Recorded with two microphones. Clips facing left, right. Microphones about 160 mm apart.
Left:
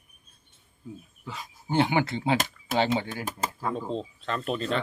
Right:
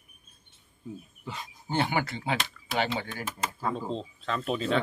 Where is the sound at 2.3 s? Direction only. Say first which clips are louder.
Left 5 dB; 45° left (ahead or behind).